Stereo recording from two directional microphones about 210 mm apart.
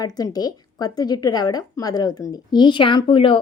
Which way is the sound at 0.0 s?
20° left (ahead or behind).